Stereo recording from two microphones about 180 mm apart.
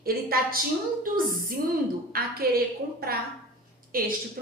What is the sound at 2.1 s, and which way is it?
Speech, 55° right (ahead or behind).